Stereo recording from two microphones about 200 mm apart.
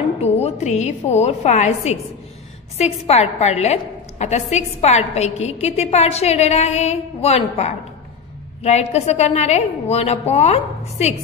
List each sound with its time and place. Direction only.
0.2 s a woman's voice: 35° left (ahead or behind)